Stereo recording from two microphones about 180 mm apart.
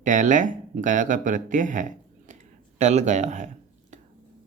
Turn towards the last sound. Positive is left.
turn(degrees=-40)  # may be behind; listen again after turning